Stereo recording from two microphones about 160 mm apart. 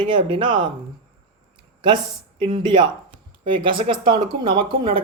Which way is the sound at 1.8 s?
30° right (ahead or behind).